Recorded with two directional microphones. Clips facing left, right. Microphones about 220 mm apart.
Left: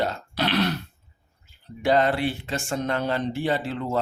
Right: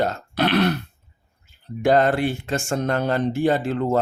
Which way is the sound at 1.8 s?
45° right (ahead or behind).